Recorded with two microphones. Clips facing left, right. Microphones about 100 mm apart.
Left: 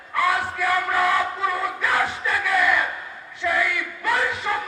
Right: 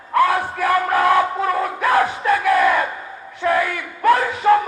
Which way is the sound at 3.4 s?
45° right (ahead or behind).